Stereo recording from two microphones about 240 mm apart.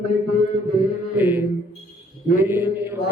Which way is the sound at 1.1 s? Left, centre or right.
Centre.